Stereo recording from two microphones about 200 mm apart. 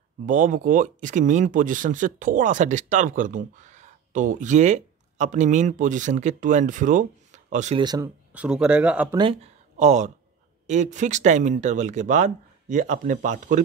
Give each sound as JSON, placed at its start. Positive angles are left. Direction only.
{"t": 0.3, "sound": "speech", "side_deg": -40}
{"t": 7.8, "sound": "speech", "side_deg": -20}
{"t": 8.3, "sound": "speech", "side_deg": -5}
{"t": 9.1, "sound": "speech", "side_deg": -25}